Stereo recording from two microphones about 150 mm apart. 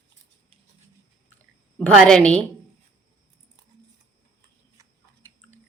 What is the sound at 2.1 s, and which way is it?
Speech, 10° left (ahead or behind).